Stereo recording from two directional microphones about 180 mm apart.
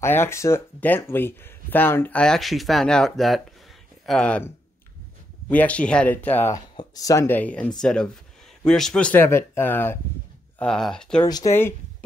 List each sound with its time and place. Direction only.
0.0 s speech: 15° left (ahead or behind)
5.5 s speech: 10° left (ahead or behind)
11.2 s speech: 20° left (ahead or behind)